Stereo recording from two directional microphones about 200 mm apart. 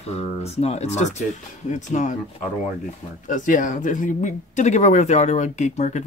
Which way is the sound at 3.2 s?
40° left (ahead or behind).